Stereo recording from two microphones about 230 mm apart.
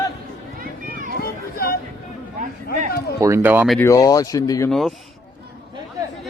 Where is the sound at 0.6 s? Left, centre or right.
Right.